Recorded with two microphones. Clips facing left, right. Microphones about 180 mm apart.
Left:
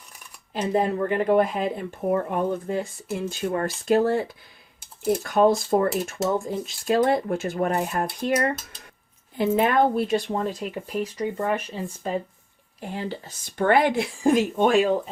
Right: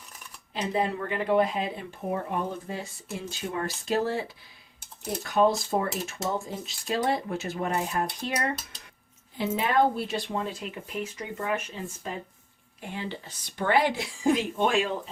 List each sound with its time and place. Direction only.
0.5 s speech: 45° left (ahead or behind)
5.3 s speech: 50° left (ahead or behind); by 11.8 s 35° left (ahead or behind)
12.8 s speech: 40° left (ahead or behind)